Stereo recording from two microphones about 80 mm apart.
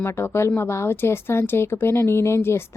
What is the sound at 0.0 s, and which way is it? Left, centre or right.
A woman's voice, left.